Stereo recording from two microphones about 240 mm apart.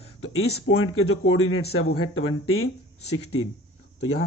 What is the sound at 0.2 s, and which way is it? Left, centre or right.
Speech, left.